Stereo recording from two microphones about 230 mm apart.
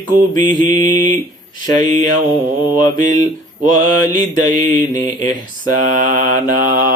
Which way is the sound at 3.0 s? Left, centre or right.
Right.